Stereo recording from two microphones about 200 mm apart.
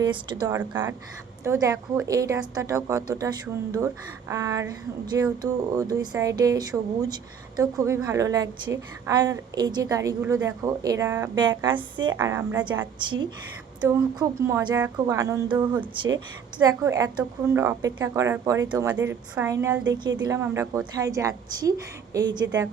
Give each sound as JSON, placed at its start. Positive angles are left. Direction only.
{"t": 0.0, "sound": "a woman's voice", "side_deg": -20}
{"t": 12.1, "sound": "speech", "side_deg": -10}
{"t": 13.0, "sound": "a woman's voice", "side_deg": -25}
{"t": 16.0, "sound": "a woman's voice", "side_deg": -75}
{"t": 16.6, "sound": "speech", "side_deg": -15}